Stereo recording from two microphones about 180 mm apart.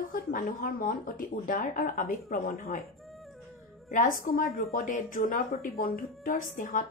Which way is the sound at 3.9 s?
50° left (ahead or behind).